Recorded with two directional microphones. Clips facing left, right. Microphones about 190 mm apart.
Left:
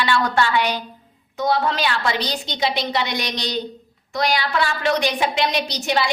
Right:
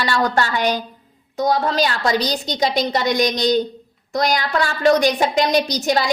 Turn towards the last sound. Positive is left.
turn(degrees=-40)  # may be behind; listen again after turning